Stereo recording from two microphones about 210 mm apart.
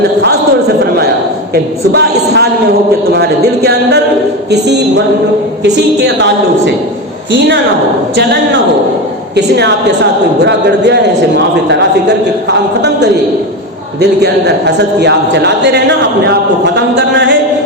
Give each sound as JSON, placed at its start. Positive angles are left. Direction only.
{"t": 1.5, "sound": "a man's voice", "side_deg": -50}
{"t": 14.0, "sound": "a man's voice", "side_deg": -50}